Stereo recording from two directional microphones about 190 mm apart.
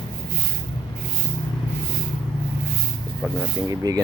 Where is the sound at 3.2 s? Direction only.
10° right (ahead or behind).